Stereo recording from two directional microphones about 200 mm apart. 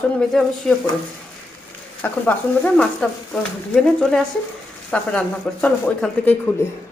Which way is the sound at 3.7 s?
5° left (ahead or behind).